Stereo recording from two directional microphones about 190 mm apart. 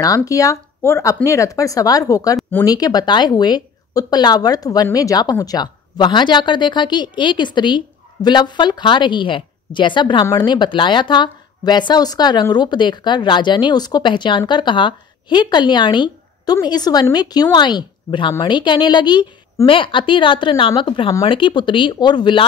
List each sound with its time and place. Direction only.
0.0 s speech: 20° left (ahead or behind)